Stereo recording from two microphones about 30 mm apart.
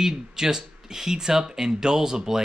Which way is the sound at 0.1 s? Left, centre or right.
Right.